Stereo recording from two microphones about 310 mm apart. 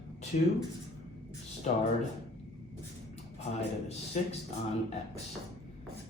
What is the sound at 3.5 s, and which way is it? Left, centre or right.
Speech, left.